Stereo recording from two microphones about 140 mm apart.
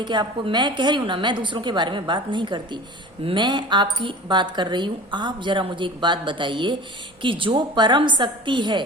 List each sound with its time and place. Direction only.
0.0 s speech: 35° right (ahead or behind)